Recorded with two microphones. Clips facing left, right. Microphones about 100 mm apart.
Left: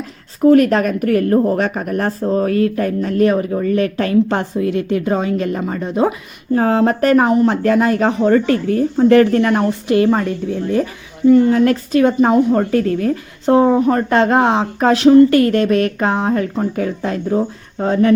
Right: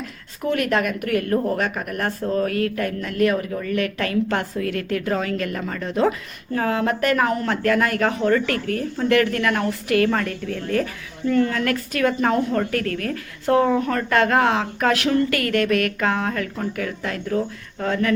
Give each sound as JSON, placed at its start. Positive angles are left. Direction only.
{"t": 0.4, "sound": "a woman's voice", "side_deg": 40}
{"t": 6.6, "sound": "speech", "side_deg": 35}
{"t": 7.3, "sound": "a woman's voice", "side_deg": 25}